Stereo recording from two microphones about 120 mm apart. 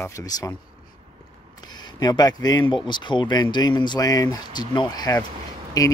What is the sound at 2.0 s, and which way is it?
Speech, 35° left (ahead or behind).